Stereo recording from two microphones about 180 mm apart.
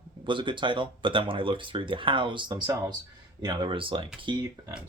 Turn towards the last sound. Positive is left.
turn(degrees=-25)  # may be behind; listen again after turning